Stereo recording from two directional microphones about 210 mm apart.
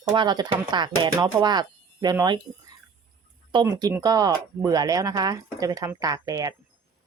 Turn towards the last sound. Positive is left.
turn(degrees=-15)  # may be behind; listen again after turning